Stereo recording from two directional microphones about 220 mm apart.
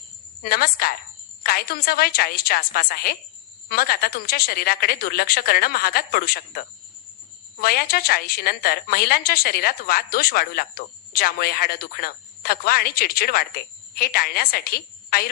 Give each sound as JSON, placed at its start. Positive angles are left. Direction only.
{"t": 0.4, "sound": "a woman's voice", "side_deg": 45}